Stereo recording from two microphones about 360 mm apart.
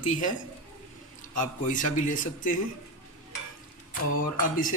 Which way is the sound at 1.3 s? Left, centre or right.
Left.